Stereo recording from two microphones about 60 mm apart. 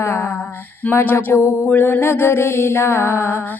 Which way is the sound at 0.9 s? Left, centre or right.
Left.